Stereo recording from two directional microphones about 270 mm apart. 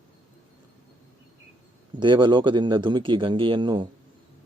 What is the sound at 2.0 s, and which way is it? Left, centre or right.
A man's voice, centre.